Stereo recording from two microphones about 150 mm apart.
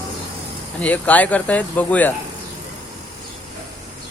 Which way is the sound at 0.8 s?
10° left (ahead or behind).